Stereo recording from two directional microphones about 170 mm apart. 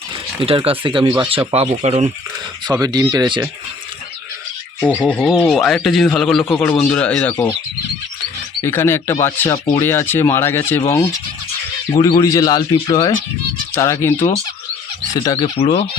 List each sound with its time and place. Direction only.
0.4 s speech: 35° right (ahead or behind)
2.8 s speech: 25° right (ahead or behind)
4.8 s speech: 10° left (ahead or behind)
8.6 s speech: 15° left (ahead or behind)
11.9 s speech: 25° left (ahead or behind)
15.5 s speech: 35° left (ahead or behind)